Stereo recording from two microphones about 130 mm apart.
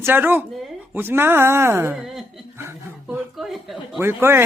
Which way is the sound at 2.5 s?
15° right (ahead or behind).